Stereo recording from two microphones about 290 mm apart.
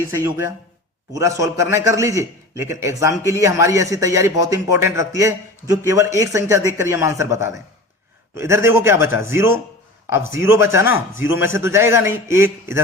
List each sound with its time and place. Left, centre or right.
0.0 s a man's voice: centre